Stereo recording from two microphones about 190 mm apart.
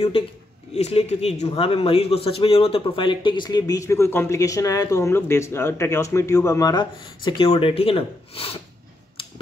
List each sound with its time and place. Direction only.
0.7 s a man's voice: 35° left (ahead or behind)